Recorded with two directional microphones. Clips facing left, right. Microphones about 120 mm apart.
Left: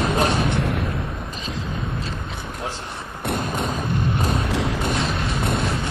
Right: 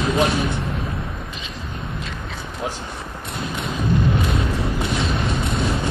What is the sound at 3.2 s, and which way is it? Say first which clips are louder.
Tap: left 6 dB; 60° left (ahead or behind).